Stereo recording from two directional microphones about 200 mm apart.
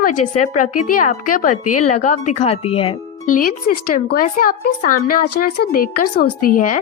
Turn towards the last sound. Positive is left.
turn(degrees=45)  # may be behind; listen again after turning